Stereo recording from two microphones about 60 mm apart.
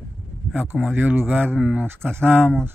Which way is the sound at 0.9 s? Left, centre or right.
Right.